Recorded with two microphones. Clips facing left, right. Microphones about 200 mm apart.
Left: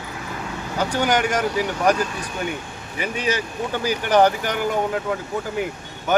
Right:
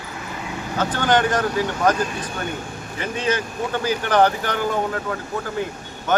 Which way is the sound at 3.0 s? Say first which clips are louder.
Right 1 dB; 10° left (ahead or behind).